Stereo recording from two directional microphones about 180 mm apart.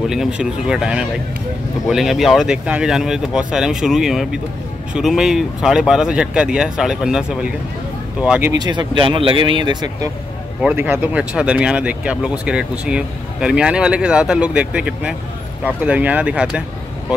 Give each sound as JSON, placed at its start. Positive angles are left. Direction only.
{"t": 0.1, "sound": "speech", "side_deg": -5}
{"t": 8.5, "sound": "speech", "side_deg": -25}
{"t": 10.6, "sound": "speech", "side_deg": -10}